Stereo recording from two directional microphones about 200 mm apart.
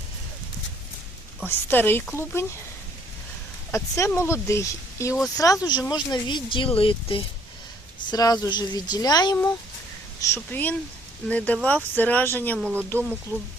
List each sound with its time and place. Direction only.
1.5 s speech: 10° left (ahead or behind)
3.7 s speech: 15° left (ahead or behind)
12.5 s speech: 5° right (ahead or behind)
12.9 s speech: 5° left (ahead or behind)